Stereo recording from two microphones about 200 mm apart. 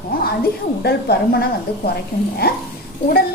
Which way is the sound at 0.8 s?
50° left (ahead or behind).